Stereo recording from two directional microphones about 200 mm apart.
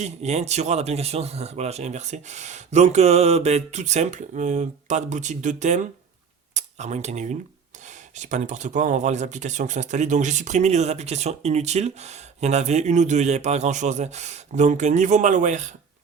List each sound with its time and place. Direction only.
0.0 s speech: 35° right (ahead or behind)